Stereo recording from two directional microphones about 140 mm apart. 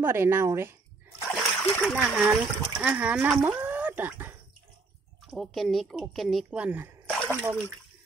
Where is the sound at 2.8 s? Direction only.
10° right (ahead or behind).